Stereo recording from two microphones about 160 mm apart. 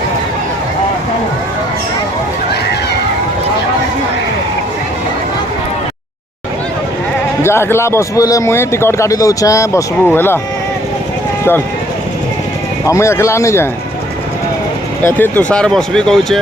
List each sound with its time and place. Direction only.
7.4 s a man's voice: 15° left (ahead or behind)
12.8 s a man's voice: 20° left (ahead or behind)
15.0 s speech: 10° left (ahead or behind)